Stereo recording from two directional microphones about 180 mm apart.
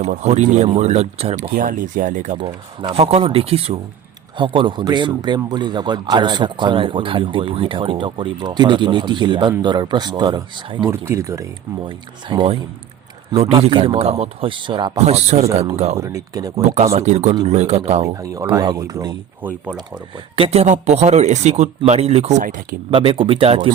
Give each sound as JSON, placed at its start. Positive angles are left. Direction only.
{"t": 0.0, "sound": "speech", "side_deg": -35}
{"t": 1.5, "sound": "speech", "side_deg": -50}
{"t": 2.4, "sound": "speech", "side_deg": -30}
{"t": 10.9, "sound": "speech", "side_deg": -15}
{"t": 11.9, "sound": "speech", "side_deg": -25}
{"t": 14.9, "sound": "speech", "side_deg": -35}
{"t": 16.0, "sound": "speech", "side_deg": -15}
{"t": 16.6, "sound": "speech", "side_deg": -35}
{"t": 18.0, "sound": "speech", "side_deg": -20}
{"t": 19.4, "sound": "speech", "side_deg": -10}
{"t": 20.3, "sound": "speech", "side_deg": -35}
{"t": 22.9, "sound": "speech", "side_deg": -30}